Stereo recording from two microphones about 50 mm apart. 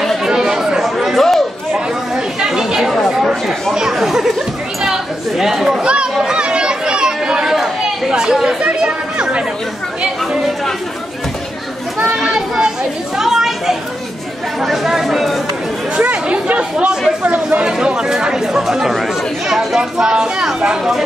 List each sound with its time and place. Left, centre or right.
0.2 s chatter: centre
0.8 s chatter: centre
1.7 s chatter: centre
3.9 s a sound: centre
5.3 s chatter: centre
5.8 s chatter: right
12.2 s children playing: centre
13.2 s a sound: centre
14.6 s chatter: centre
16.0 s chatter: right
17.2 s speech: right
17.6 s speech: centre